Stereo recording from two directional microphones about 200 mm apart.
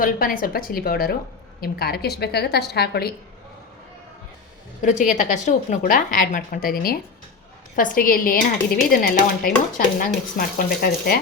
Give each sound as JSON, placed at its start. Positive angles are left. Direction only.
{"t": 0.0, "sound": "a woman's voice", "side_deg": 45}
{"t": 4.8, "sound": "a woman's voice", "side_deg": 40}